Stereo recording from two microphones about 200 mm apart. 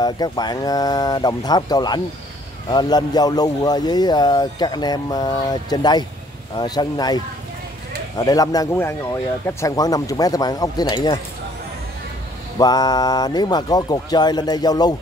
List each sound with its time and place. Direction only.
0.0 s speech: 20° left (ahead or behind)
8.2 s speech: 20° left (ahead or behind)
12.5 s speech: 20° left (ahead or behind)